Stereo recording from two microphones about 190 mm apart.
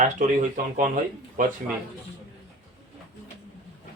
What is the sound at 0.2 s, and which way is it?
Speech, 40° right (ahead or behind).